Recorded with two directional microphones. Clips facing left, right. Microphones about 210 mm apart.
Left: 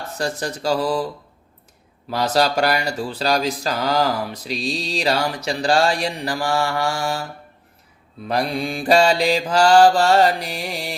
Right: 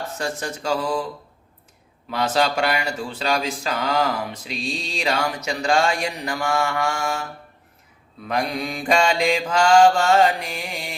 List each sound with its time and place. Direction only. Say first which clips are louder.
0.2 s speech: left 5 dB; 35° left (ahead or behind)
2.0 s speech: left 2 dB; 40° left (ahead or behind)
8.3 s speech: left 2 dB; 30° left (ahead or behind)